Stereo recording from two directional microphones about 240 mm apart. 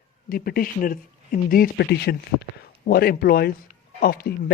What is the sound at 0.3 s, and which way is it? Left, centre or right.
Speech, left.